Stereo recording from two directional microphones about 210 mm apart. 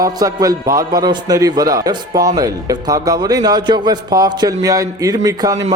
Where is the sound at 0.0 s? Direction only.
15° right (ahead or behind).